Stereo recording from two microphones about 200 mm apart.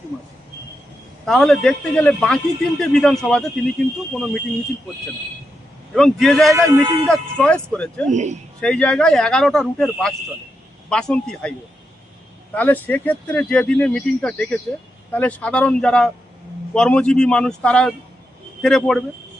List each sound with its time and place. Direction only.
1.2 s a man's voice: centre (ahead or behind)
5.9 s a man's voice: centre (ahead or behind)
8.1 s a man's voice: 35° right (ahead or behind)
8.6 s a man's voice: 5° left (ahead or behind)
12.5 s a man's voice: 10° left (ahead or behind)